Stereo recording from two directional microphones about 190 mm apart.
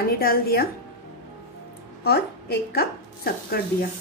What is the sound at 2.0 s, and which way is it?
Speech, 55° left (ahead or behind).